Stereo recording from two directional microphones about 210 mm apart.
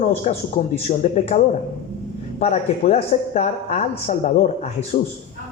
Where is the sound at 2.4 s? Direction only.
30° left (ahead or behind).